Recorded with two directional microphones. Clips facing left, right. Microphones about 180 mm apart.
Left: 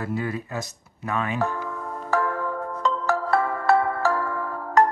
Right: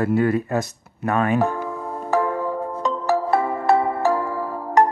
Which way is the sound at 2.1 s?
20° right (ahead or behind).